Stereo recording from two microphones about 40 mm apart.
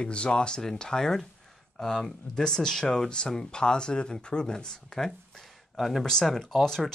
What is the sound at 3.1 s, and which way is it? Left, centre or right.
Speech, left.